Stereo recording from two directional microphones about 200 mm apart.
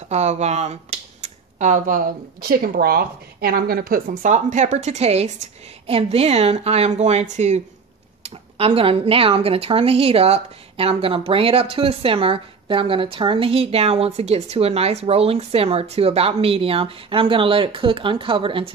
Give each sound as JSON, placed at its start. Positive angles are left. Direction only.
{"t": 0.1, "sound": "speech", "side_deg": -35}